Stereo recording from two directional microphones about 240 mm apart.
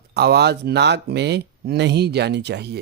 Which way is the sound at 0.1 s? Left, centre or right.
Right.